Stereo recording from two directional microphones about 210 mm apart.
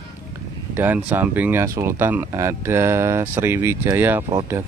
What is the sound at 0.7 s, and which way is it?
Speech, 10° right (ahead or behind).